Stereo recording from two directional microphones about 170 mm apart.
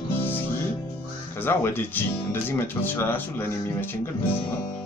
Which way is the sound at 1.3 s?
15° left (ahead or behind).